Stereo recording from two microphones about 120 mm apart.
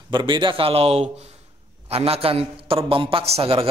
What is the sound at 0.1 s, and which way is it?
A man's voice, 40° right (ahead or behind).